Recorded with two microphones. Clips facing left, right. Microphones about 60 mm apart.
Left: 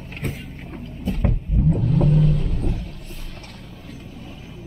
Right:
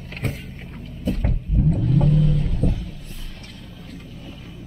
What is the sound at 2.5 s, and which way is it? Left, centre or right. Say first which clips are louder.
Music: right 3 dB; left.